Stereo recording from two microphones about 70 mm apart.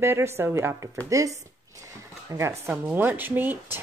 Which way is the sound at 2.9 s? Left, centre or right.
Right.